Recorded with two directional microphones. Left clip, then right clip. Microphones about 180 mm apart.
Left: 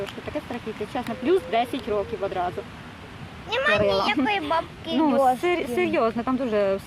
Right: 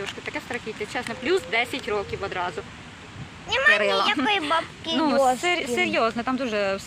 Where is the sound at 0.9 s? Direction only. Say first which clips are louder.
Left 2 dB; 15° left (ahead or behind).